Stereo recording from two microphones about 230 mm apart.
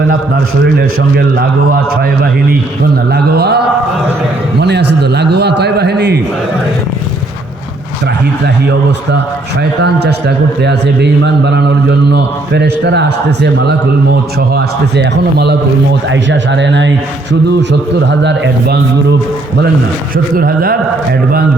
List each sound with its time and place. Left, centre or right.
0.8 s a man's voice: right
3.1 s a man's voice: right
9.8 s a man's voice: right
20.3 s a man's voice: right